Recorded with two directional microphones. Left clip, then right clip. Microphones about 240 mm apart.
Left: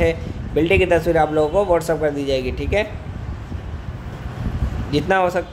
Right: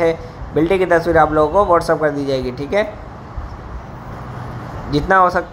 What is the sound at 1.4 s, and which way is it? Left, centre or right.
Speech, centre.